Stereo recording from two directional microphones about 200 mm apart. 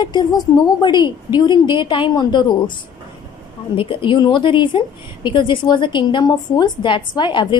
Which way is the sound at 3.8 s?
25° left (ahead or behind).